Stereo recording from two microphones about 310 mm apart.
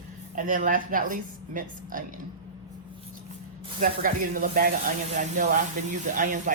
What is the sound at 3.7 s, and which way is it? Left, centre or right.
Speech, right.